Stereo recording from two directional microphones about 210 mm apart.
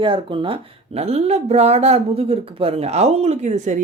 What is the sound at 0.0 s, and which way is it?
A woman's voice, 25° right (ahead or behind).